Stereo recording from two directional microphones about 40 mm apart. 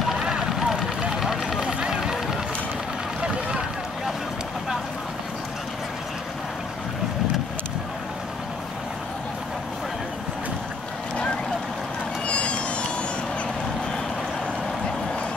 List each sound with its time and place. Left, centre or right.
0.2 s vehicle: centre
1.2 s run: centre
1.6 s run: right
12.3 s run: left